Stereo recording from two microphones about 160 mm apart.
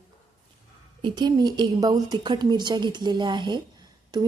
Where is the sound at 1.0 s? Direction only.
30° right (ahead or behind).